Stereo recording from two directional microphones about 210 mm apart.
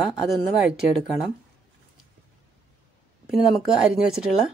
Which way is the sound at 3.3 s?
Centre (ahead or behind).